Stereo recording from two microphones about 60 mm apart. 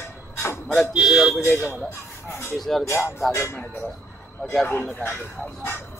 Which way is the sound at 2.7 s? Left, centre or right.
Centre.